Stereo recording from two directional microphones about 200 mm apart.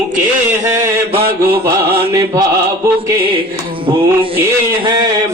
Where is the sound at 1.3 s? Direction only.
10° right (ahead or behind).